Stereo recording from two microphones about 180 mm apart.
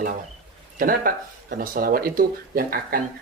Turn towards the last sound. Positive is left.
turn(degrees=-55)  # may be behind; listen again after turning